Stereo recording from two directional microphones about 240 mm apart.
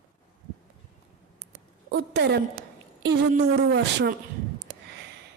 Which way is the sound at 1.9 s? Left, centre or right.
Right.